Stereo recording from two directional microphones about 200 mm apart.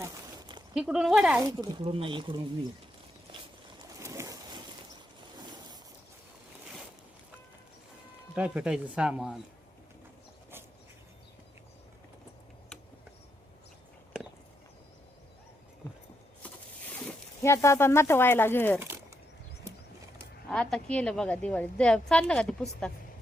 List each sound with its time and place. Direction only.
0.0 s a sound: 20° right (ahead or behind)
0.7 s a woman's voice: 5° right (ahead or behind)
1.4 s speech: 25° right (ahead or behind)
4.0 s boat: 15° right (ahead or behind)
8.4 s a woman's voice: 5° right (ahead or behind)
17.1 s speech: 15° left (ahead or behind)
20.5 s a woman's voice: 5° left (ahead or behind)